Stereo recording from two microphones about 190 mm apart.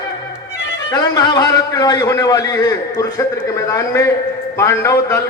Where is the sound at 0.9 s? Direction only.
20° left (ahead or behind).